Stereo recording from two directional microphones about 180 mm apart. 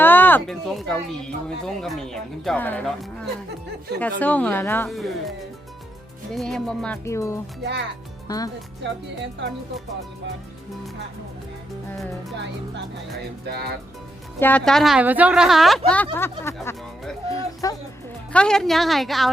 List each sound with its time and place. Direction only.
0.0 s speech: 10° left (ahead or behind)
4.9 s speech: centre (ahead or behind)
6.3 s speech: 5° left (ahead or behind); by 8.4 s 20° left (ahead or behind)
8.8 s speech: 80° right
13.5 s speech: 60° right (ahead or behind)
14.3 s speech: 10° left (ahead or behind)
18.3 s speech: 5° left (ahead or behind)